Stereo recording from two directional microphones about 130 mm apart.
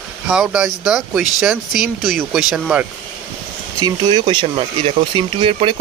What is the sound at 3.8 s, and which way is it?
Speech, 35° right (ahead or behind).